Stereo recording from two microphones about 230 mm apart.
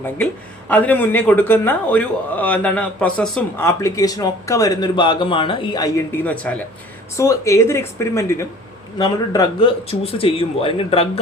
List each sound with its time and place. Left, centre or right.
0.7 s a man's voice: centre; by 11.2 s left